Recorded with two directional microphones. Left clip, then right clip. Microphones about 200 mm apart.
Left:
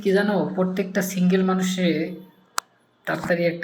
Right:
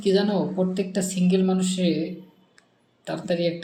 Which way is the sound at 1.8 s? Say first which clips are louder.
Left 2 dB; 10° right (ahead or behind).